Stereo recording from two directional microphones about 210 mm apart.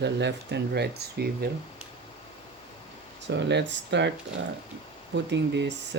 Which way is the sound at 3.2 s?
55° right (ahead or behind).